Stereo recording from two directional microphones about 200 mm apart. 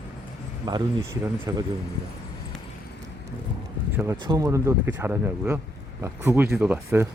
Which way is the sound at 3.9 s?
15° right (ahead or behind).